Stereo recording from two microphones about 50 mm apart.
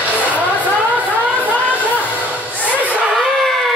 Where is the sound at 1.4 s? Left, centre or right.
Right.